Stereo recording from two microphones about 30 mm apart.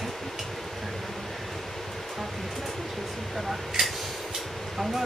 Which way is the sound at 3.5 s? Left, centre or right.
Centre.